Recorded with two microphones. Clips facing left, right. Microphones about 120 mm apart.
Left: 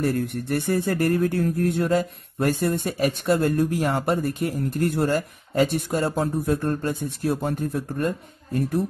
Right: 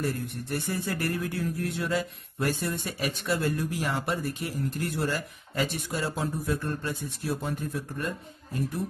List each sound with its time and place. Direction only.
0.0 s speech: 60° left (ahead or behind)